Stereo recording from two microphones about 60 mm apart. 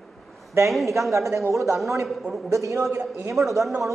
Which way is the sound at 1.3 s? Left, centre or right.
Right.